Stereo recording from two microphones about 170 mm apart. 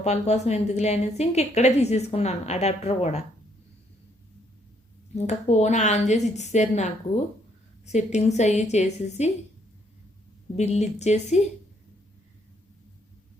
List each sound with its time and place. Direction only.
0.0 s a woman's voice: 40° left (ahead or behind)
5.1 s a woman's voice: 40° left (ahead or behind)
10.6 s a woman's voice: 40° left (ahead or behind)